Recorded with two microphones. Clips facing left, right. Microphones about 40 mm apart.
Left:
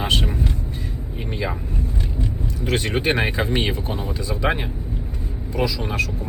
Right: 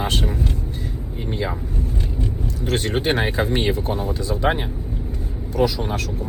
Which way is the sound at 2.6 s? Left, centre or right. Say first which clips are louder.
Even; left.